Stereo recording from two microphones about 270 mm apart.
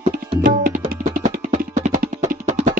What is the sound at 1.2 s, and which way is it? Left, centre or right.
Music, right.